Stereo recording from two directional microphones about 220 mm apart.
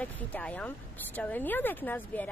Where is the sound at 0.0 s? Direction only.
5° left (ahead or behind).